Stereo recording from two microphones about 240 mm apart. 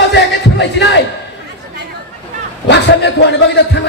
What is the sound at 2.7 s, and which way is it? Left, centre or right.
A man's voice, left.